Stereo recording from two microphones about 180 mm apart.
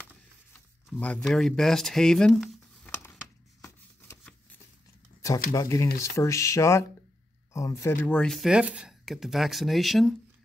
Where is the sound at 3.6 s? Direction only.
15° left (ahead or behind).